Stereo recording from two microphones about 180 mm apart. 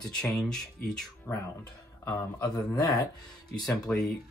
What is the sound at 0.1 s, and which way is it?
Speech, 5° left (ahead or behind).